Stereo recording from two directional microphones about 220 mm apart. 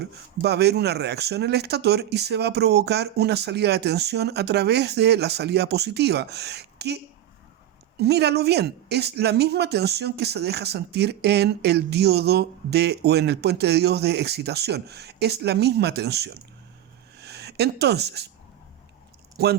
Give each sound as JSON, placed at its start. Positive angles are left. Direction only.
{"t": 0.0, "sound": "speech", "side_deg": -50}
{"t": 17.2, "sound": "a sound", "side_deg": -50}
{"t": 19.4, "sound": "speech", "side_deg": -45}